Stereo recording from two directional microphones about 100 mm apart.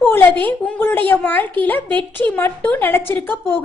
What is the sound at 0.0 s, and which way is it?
A woman's voice, 20° left (ahead or behind).